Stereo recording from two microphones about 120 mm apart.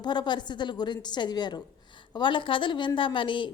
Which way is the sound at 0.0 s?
40° left (ahead or behind).